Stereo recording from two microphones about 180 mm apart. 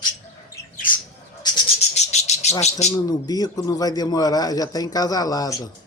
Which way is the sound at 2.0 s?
40° left (ahead or behind).